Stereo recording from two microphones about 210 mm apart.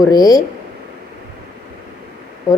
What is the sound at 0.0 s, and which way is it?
Speech, 15° left (ahead or behind).